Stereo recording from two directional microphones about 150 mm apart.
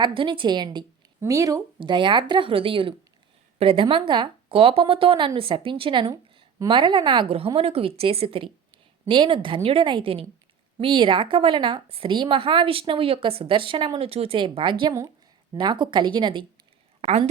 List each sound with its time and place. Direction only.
0.0 s a woman's voice: 35° right (ahead or behind)
1.8 s a woman's voice: 30° right (ahead or behind)